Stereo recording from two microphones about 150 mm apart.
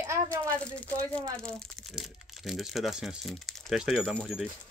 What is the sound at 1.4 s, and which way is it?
Speech, centre (ahead or behind).